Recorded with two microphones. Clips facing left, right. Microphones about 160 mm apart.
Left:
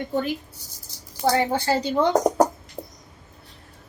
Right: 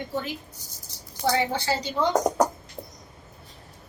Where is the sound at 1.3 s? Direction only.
50° left (ahead or behind).